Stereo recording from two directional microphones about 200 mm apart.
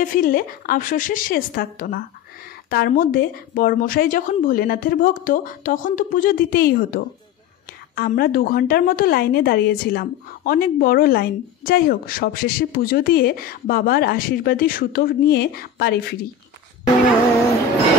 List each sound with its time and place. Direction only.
0.0 s a woman's voice: 45° left (ahead or behind)